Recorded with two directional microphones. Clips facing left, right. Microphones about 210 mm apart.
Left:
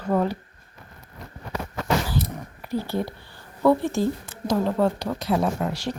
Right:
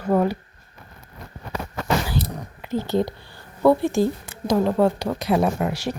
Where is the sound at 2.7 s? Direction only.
20° right (ahead or behind).